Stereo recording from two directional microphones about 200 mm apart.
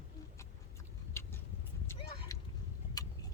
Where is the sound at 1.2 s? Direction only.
10° left (ahead or behind).